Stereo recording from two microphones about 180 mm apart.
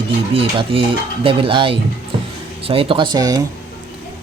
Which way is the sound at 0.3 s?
30° right (ahead or behind).